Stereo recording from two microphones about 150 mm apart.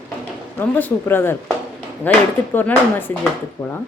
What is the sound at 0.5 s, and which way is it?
Speech, 10° left (ahead or behind).